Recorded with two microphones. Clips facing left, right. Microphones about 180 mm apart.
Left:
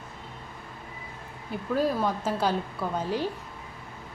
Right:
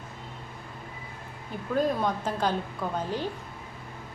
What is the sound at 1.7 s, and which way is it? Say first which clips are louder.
Speech: even; 5° left (ahead or behind).